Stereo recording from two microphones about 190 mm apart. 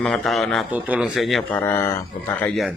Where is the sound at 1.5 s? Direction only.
10° left (ahead or behind).